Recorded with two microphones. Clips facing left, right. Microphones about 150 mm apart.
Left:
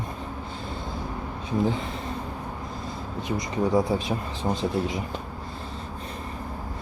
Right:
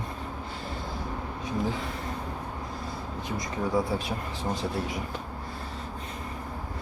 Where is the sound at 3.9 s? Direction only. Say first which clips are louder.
Left 4 dB; 20° left (ahead or behind).